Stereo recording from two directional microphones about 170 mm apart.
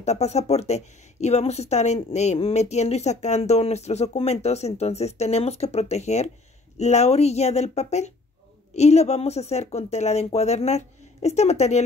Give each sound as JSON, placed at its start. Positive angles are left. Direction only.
{"t": 0.0, "sound": "a woman's voice", "side_deg": 40}